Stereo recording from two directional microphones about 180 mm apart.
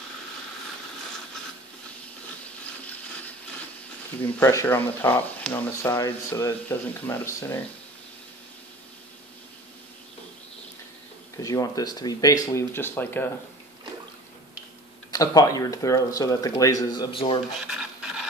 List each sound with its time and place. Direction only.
4.4 s speech: 15° left (ahead or behind)
11.3 s speech: 20° left (ahead or behind)
15.0 s speech: 20° left (ahead or behind)